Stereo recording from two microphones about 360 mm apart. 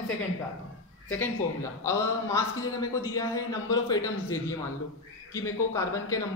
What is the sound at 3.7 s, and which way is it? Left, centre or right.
A man's voice, centre.